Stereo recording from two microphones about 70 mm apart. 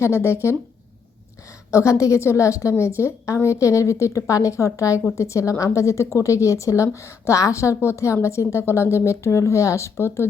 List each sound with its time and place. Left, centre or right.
0.0 s speech: left
1.7 s a woman's voice: left